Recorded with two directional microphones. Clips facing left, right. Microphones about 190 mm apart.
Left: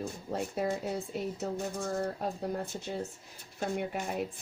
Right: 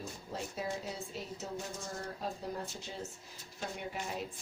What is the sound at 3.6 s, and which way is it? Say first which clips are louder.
Speech: left 7 dB; 55° left (ahead or behind).